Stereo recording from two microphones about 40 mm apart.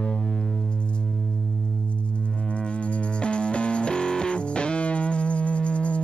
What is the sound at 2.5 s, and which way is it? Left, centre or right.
Music, left.